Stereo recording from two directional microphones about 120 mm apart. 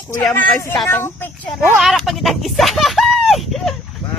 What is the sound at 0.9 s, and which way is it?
Speech, 20° left (ahead or behind).